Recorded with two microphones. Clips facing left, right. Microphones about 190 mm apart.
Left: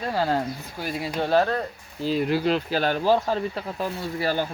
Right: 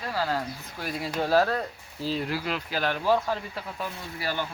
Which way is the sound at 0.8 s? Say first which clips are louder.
Left 2 dB; centre (ahead or behind).